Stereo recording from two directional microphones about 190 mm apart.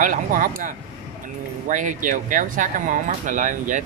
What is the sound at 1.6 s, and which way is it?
Speech, 40° right (ahead or behind).